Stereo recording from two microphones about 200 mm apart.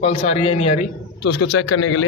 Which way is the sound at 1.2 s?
60° left (ahead or behind).